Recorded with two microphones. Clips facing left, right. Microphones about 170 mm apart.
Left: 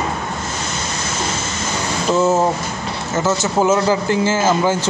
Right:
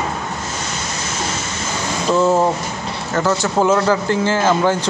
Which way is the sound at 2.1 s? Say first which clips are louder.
Right 1 dB; 5° left (ahead or behind).